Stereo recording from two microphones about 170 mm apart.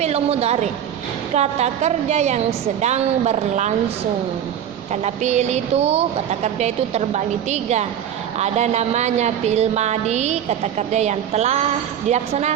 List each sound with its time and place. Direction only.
0.0 s a woman's voice: 40° right (ahead or behind)
5.0 s a woman's voice: 40° right (ahead or behind)